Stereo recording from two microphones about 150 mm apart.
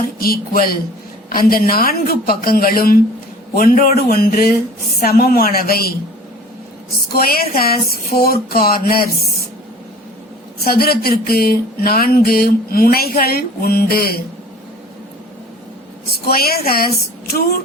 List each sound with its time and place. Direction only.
0.2 s a woman's voice: 80° left
4.9 s speech: 85° left
7.1 s speech: 85° left
10.6 s speech: 90° left
16.2 s a woman's voice: 90° left